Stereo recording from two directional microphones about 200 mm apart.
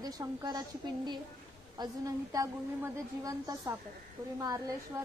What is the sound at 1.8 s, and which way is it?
A woman's voice, 15° right (ahead or behind).